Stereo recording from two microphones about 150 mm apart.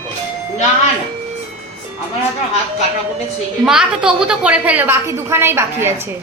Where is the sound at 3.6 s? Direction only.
5° right (ahead or behind).